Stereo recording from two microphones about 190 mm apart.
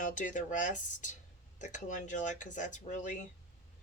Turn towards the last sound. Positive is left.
turn(degrees=40)  # may be behind; listen again after turning